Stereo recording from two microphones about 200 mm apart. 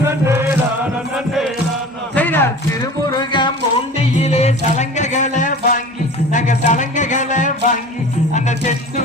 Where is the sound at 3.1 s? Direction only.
25° left (ahead or behind).